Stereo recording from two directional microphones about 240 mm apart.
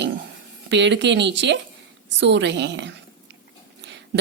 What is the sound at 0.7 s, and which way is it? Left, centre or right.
A woman's voice, right.